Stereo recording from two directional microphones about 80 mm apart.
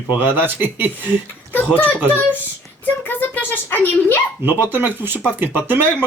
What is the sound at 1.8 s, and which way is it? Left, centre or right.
Speech, centre.